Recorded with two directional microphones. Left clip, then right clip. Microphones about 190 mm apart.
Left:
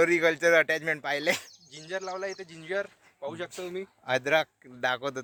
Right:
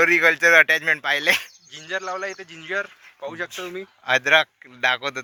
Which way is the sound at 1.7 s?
10° right (ahead or behind).